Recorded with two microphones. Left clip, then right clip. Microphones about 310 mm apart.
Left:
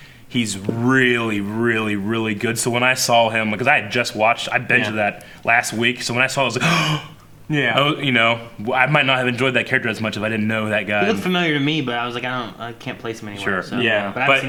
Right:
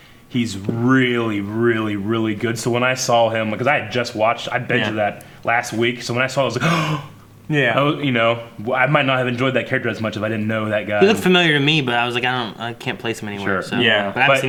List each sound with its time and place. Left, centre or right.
0.3 s speech: right
7.5 s speech: right
7.8 s speech: right
11.0 s speech: left
13.5 s speech: right
14.2 s speech: left